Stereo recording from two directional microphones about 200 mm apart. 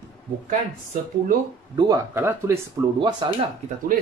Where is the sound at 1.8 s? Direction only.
15° right (ahead or behind).